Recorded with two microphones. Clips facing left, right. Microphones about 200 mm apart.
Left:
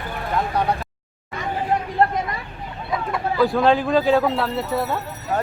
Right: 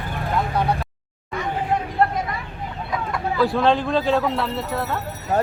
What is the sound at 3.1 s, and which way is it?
Speech, centre (ahead or behind).